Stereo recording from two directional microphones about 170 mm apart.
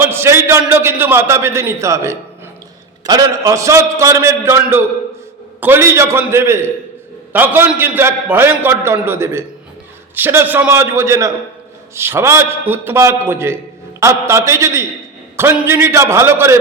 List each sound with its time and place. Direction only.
0.0 s a man's voice: 15° right (ahead or behind)